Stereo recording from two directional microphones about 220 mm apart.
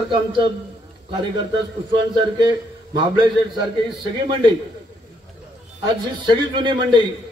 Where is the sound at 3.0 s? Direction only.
20° right (ahead or behind).